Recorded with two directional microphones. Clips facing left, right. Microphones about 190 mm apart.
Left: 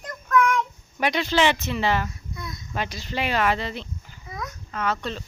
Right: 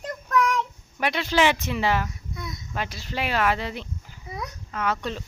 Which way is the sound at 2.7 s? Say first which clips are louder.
Left 2 dB; centre (ahead or behind).